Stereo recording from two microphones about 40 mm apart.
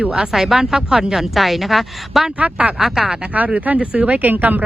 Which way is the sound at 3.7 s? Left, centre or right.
Right.